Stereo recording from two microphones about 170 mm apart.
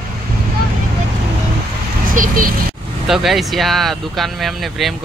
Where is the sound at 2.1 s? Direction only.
50° right (ahead or behind).